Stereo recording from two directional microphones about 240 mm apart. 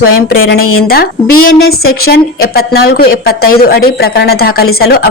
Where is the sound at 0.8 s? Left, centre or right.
Left.